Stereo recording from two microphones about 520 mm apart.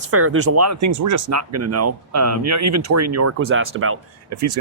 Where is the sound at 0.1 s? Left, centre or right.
Right.